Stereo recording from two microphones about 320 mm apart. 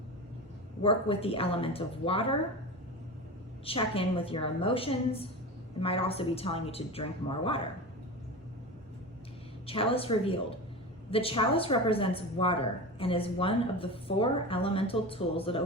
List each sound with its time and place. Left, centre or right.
0.8 s speech: centre
3.7 s speech: centre
9.6 s speech: centre